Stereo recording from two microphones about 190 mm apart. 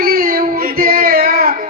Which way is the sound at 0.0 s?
50° right (ahead or behind).